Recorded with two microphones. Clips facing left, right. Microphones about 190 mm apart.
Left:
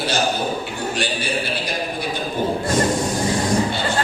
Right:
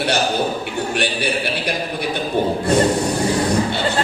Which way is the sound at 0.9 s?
65° right (ahead or behind).